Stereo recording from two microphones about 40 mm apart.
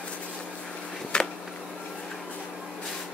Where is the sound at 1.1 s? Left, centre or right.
Left.